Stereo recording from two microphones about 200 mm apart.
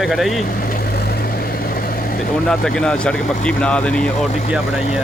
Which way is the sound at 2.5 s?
5° left (ahead or behind).